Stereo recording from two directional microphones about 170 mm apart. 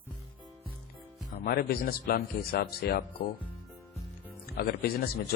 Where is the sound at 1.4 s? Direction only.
65° left (ahead or behind).